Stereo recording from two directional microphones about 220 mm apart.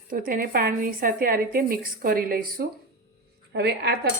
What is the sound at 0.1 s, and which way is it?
A woman's voice, 40° right (ahead or behind).